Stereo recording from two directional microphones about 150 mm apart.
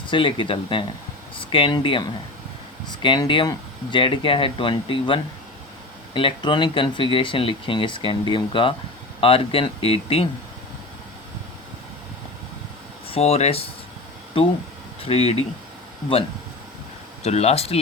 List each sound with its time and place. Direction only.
0.1 s speech: 35° left (ahead or behind)
13.1 s speech: 40° left (ahead or behind)
17.2 s speech: 45° left (ahead or behind)